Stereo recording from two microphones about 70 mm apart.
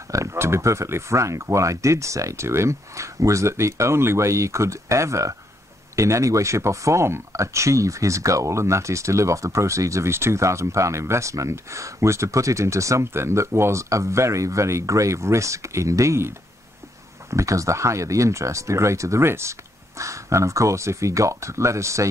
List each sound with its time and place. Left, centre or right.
0.1 s speech: right